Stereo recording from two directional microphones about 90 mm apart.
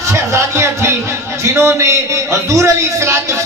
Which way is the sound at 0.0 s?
35° right (ahead or behind).